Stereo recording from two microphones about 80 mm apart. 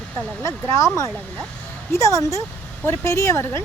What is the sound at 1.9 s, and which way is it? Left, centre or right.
Speech, left.